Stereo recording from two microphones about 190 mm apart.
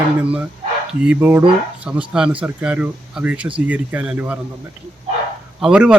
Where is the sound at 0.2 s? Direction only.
10° right (ahead or behind).